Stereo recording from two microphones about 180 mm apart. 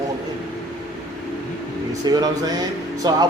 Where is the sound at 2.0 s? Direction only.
20° right (ahead or behind).